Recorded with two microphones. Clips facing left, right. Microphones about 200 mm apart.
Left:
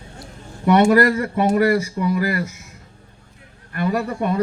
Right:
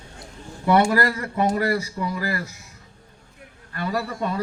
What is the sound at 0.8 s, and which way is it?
A man's voice, 20° left (ahead or behind).